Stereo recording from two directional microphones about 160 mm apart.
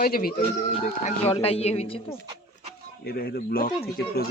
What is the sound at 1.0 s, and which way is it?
Speech, 40° left (ahead or behind).